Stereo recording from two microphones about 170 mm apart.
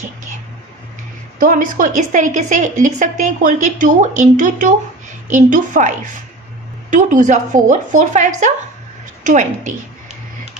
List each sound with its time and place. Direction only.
1.4 s a woman's voice: 50° right (ahead or behind)